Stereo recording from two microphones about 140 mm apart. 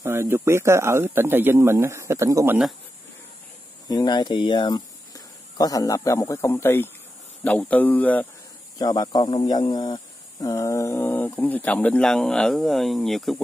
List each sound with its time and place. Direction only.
0.0 s speech: 15° right (ahead or behind)
3.9 s speech: 30° left (ahead or behind); by 8.3 s 10° left (ahead or behind)
8.7 s speech: 25° left (ahead or behind); by 13.4 s centre (ahead or behind)